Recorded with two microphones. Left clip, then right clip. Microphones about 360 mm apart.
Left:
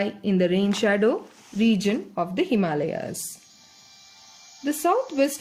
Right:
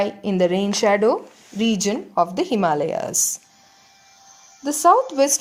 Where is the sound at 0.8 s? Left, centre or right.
Right.